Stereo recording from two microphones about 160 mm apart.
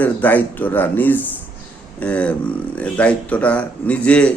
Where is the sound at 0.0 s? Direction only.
10° left (ahead or behind).